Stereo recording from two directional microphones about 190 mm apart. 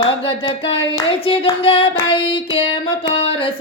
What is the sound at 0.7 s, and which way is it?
Hands, 30° left (ahead or behind).